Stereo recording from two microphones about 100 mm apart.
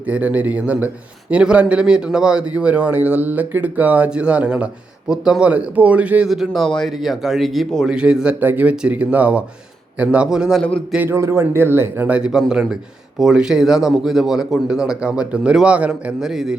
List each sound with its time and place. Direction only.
0.0 s speech: 15° right (ahead or behind)
10.6 s speech: 10° left (ahead or behind)
11.1 s a man's voice: 25° right (ahead or behind); by 16.6 s 5° right (ahead or behind)